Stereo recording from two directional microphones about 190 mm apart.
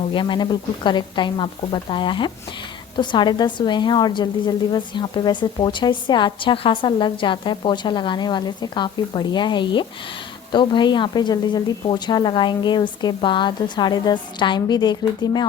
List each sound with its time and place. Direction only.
0.1 s a woman's voice: 25° left (ahead or behind)